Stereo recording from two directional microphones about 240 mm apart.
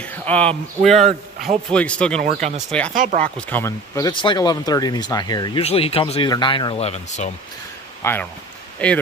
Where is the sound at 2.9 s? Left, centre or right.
Right.